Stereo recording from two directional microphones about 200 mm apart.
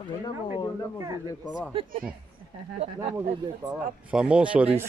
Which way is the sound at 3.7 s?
5° right (ahead or behind).